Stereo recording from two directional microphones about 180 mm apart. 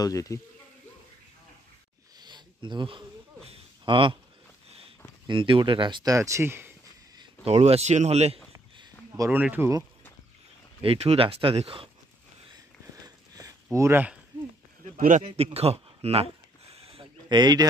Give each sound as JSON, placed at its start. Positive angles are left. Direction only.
{"t": 0.0, "sound": "speech", "side_deg": 20}
{"t": 2.1, "sound": "a sound", "side_deg": -25}
{"t": 4.6, "sound": "sniff", "side_deg": -35}
{"t": 5.2, "sound": "speech", "side_deg": -30}
{"t": 7.4, "sound": "speech", "side_deg": -35}
{"t": 9.1, "sound": "speech", "side_deg": -15}
{"t": 10.8, "sound": "speech", "side_deg": -35}
{"t": 12.5, "sound": "a sound", "side_deg": -20}
{"t": 15.0, "sound": "speech", "side_deg": -45}
{"t": 15.2, "sound": "a sound", "side_deg": -35}